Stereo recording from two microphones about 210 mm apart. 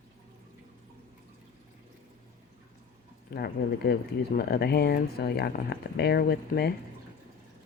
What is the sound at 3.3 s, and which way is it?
Speech, 50° left (ahead or behind).